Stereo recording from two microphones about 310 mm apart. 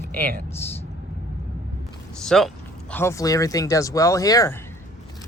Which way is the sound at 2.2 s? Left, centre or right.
Centre.